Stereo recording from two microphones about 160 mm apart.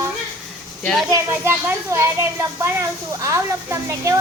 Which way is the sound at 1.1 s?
15° right (ahead or behind).